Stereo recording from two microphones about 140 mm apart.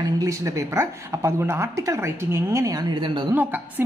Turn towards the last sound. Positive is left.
turn(degrees=-15)  # may be behind; listen again after turning